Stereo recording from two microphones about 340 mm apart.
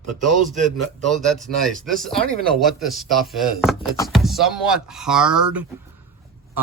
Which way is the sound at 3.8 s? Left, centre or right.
Centre.